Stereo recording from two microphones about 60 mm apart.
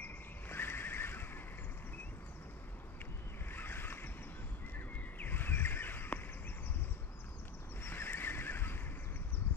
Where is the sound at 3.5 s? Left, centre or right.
Left.